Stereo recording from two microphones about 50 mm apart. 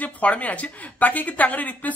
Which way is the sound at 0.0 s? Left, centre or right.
Left.